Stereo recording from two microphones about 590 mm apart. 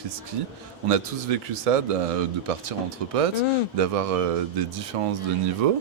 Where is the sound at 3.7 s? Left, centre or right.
Right.